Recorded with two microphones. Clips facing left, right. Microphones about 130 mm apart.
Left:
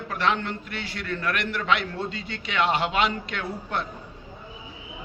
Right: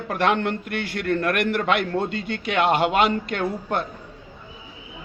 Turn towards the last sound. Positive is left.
turn(degrees=-50)  # may be behind; listen again after turning